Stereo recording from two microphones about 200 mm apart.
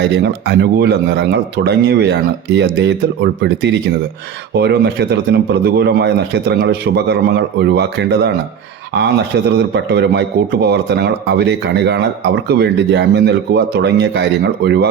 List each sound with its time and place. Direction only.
0.1 s a man's voice: 55° right (ahead or behind)
9.7 s a man's voice: 55° right (ahead or behind)